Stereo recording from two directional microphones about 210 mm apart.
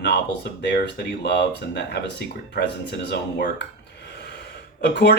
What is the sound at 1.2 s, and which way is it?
Speech, 55° left (ahead or behind).